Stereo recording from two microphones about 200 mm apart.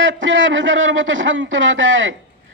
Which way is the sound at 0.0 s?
70° right (ahead or behind).